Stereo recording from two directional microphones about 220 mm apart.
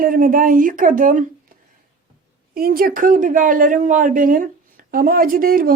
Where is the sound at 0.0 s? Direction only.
40° right (ahead or behind).